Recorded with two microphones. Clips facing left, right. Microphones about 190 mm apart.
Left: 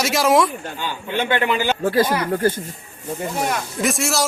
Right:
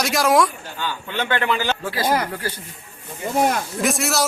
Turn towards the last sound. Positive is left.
turn(degrees=0)  # may be behind; listen again after turning